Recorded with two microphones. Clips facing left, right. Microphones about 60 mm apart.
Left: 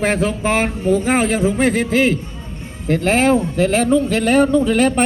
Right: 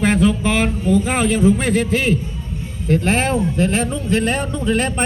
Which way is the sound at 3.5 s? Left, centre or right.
Left.